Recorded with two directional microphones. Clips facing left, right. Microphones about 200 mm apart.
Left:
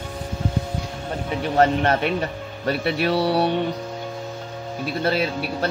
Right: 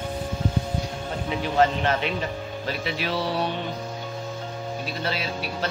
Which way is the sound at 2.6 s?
55° left (ahead or behind).